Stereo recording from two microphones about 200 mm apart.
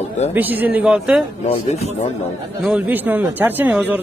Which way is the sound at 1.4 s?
35° left (ahead or behind).